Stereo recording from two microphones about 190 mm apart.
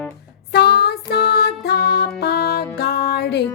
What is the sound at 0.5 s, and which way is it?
Music, 60° left (ahead or behind).